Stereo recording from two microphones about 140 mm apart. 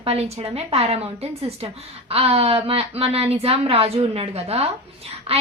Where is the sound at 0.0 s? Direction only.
45° right (ahead or behind).